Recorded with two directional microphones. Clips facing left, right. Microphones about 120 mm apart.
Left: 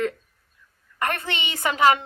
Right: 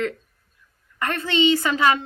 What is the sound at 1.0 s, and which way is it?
Speech, 20° left (ahead or behind).